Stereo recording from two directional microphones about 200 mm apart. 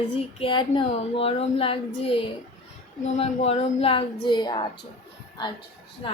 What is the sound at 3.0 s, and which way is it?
Speech, 35° left (ahead or behind).